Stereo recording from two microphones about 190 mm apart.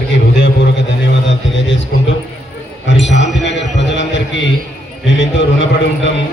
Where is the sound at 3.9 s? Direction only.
75° left (ahead or behind).